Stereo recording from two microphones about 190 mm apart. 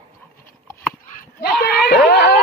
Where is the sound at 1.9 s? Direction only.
60° left (ahead or behind).